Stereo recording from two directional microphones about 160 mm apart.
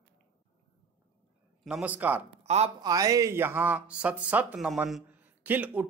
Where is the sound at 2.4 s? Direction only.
45° right (ahead or behind).